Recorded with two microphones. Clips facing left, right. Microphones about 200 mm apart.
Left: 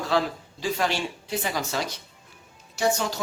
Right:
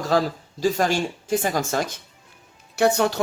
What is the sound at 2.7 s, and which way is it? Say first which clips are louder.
Speech: right 6 dB; 60° right (ahead or behind).